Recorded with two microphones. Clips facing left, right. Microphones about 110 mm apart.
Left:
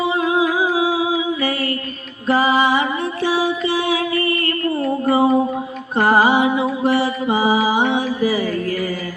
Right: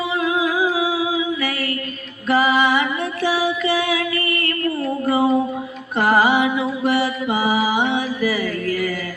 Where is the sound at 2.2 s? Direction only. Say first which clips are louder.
Left 1 dB; 30° left (ahead or behind).